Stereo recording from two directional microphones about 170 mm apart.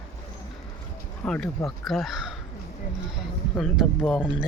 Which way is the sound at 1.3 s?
Centre (ahead or behind).